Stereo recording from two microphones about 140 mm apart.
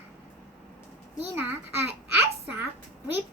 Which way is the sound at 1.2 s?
15° right (ahead or behind).